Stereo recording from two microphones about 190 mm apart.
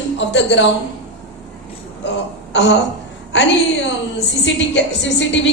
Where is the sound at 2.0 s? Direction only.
70° left (ahead or behind).